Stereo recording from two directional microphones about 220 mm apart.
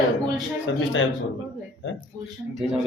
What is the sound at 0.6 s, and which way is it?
Speech, 60° left (ahead or behind).